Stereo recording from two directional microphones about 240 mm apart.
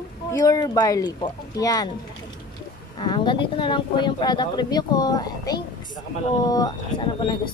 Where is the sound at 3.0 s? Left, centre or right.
Centre.